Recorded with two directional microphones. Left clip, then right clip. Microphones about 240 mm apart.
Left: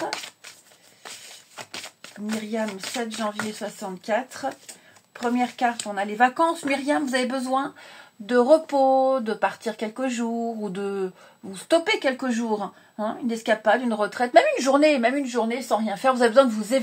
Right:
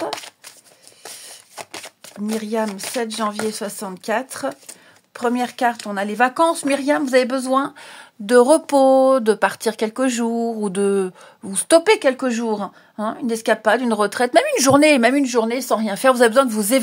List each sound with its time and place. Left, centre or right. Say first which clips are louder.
3.2 s speech: right 6 dB; right